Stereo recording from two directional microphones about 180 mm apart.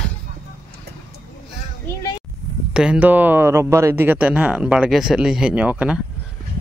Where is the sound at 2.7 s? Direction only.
5° right (ahead or behind).